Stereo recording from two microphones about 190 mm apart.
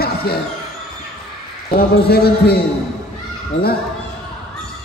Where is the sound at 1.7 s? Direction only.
55° left (ahead or behind).